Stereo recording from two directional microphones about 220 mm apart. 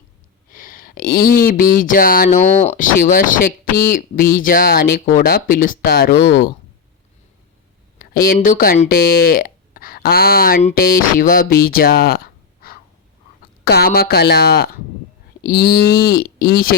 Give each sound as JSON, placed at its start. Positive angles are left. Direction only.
{"t": 0.5, "sound": "speech", "side_deg": 40}
{"t": 8.1, "sound": "speech", "side_deg": 40}
{"t": 11.6, "sound": "a sound", "side_deg": 40}
{"t": 13.7, "sound": "speech", "side_deg": 45}